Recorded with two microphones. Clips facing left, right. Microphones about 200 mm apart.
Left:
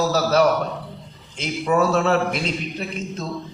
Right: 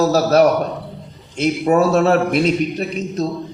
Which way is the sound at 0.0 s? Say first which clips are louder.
Right 5 dB; 40° right (ahead or behind).